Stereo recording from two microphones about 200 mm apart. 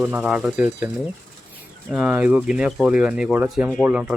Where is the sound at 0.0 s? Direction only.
10° right (ahead or behind).